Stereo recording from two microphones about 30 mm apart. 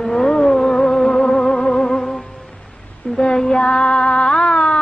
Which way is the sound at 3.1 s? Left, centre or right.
Left.